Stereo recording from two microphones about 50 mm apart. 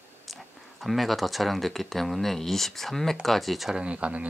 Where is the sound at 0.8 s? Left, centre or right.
Centre.